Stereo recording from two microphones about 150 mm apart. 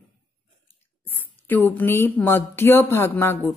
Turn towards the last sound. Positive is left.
turn(degrees=15)  # may be behind; listen again after turning